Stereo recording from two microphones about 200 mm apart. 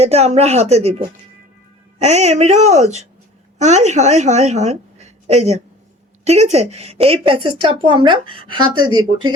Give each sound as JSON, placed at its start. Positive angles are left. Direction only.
{"t": 0.0, "sound": "a woman's voice", "side_deg": -30}